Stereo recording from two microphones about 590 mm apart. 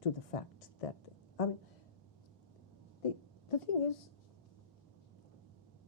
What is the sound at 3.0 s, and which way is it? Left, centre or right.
Speech, left.